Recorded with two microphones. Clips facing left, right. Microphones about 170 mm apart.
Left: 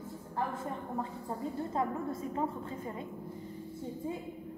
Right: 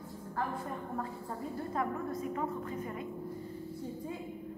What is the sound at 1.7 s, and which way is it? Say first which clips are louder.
A woman's voice: even; 25° left (ahead or behind).